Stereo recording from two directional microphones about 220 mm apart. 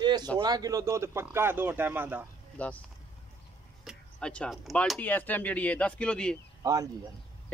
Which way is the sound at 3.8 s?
5° left (ahead or behind).